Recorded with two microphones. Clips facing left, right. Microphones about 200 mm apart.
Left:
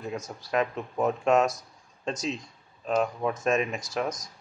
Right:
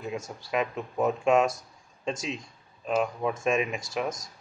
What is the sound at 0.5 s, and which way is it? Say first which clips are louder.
Speech: left 2 dB; 5° right (ahead or behind).